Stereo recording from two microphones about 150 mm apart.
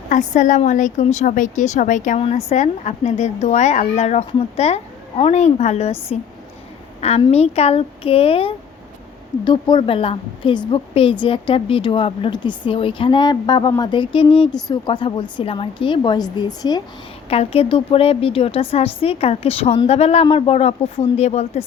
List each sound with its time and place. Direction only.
0.1 s a woman's voice: 55° left (ahead or behind)
7.3 s a woman's voice: 45° left (ahead or behind); by 16.8 s 25° left (ahead or behind)
17.2 s a woman's voice: 40° left (ahead or behind)